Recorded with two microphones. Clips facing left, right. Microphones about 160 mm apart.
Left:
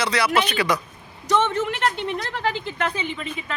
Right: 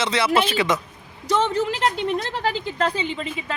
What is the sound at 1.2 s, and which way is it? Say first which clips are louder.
A woman's voice: even; 35° right (ahead or behind).